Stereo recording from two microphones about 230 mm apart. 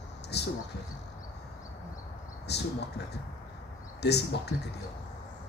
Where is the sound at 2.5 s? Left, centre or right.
Left.